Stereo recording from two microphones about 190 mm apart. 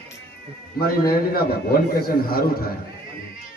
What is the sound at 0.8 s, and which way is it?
A man's voice, 50° left (ahead or behind).